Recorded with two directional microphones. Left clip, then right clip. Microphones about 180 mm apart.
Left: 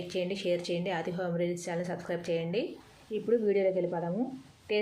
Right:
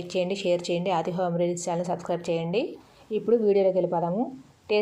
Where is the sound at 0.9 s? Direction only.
15° left (ahead or behind).